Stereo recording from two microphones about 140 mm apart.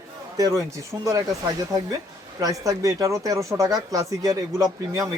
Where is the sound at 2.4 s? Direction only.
25° right (ahead or behind).